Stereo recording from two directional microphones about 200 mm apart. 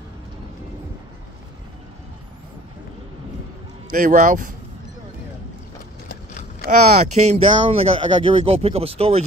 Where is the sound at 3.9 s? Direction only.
40° right (ahead or behind).